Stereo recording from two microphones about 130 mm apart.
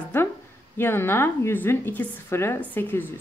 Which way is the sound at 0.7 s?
20° left (ahead or behind).